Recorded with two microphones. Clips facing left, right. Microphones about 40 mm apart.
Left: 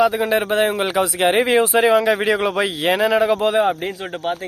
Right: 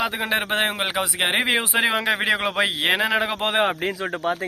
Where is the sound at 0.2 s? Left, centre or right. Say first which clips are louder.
Left 5 dB; right.